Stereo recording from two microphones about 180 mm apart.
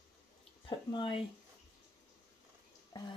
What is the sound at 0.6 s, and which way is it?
Speech, 30° left (ahead or behind).